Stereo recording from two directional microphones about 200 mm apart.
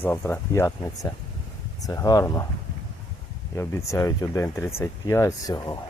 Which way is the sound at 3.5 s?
15° left (ahead or behind).